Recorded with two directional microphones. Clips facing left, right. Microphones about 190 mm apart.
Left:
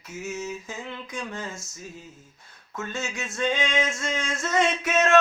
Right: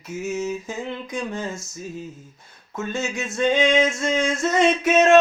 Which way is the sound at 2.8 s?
15° right (ahead or behind).